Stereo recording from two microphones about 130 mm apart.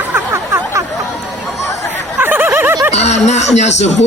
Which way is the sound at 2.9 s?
60° left (ahead or behind).